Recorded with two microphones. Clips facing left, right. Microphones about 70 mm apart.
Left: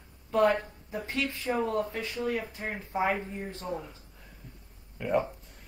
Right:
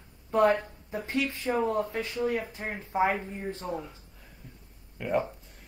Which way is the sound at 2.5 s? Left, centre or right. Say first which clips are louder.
Right 2 dB; right.